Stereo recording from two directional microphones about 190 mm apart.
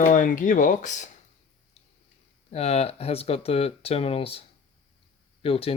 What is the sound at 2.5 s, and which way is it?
Speech, 35° left (ahead or behind).